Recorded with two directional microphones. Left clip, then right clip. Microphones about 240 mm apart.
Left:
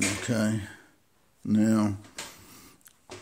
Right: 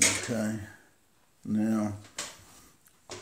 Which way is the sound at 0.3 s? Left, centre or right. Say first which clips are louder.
Left 4 dB; left.